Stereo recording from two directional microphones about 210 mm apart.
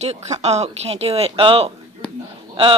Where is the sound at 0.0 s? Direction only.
30° right (ahead or behind).